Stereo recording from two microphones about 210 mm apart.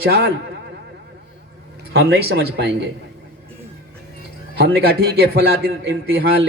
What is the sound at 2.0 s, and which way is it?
Speech, 50° right (ahead or behind).